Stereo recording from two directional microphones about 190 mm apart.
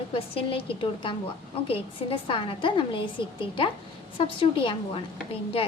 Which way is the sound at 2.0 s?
30° left (ahead or behind).